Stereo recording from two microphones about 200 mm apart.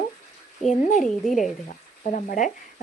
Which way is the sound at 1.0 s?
Centre (ahead or behind).